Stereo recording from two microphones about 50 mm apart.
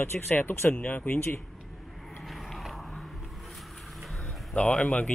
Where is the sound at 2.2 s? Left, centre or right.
Centre.